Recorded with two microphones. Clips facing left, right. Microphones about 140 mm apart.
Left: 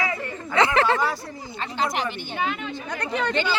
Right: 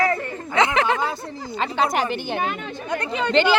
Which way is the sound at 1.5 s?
60° right (ahead or behind).